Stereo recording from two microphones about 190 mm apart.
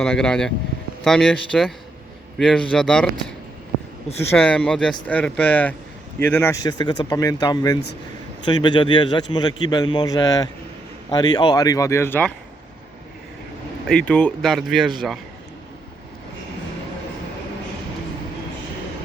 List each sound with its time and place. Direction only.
0.0 s a man's voice: 5° left (ahead or behind)
13.8 s speech: 5° left (ahead or behind)